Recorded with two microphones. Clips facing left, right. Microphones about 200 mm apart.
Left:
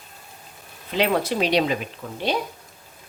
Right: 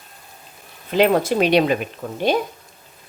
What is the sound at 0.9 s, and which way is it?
Speech, 50° right (ahead or behind).